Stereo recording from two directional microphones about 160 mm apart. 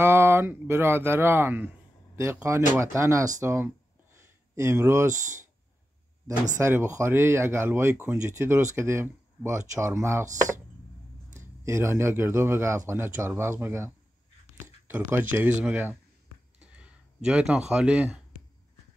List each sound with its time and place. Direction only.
0.0 s speech: 15° right (ahead or behind)
6.6 s speech: 15° right (ahead or behind)
11.3 s speech: 15° right (ahead or behind)
16.5 s a sound: 5° right (ahead or behind)